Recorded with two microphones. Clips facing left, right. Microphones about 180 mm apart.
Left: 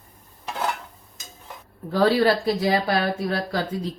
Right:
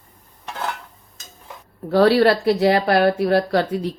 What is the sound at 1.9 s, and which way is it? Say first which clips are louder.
Speech: right 4 dB; 70° right (ahead or behind).